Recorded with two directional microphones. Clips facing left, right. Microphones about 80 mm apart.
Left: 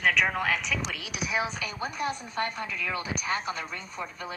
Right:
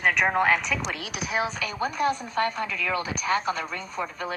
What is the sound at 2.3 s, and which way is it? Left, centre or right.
Speech, right.